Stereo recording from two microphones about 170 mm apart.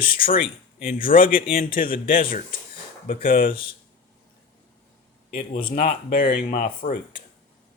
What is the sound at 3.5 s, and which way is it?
Speech, 30° left (ahead or behind).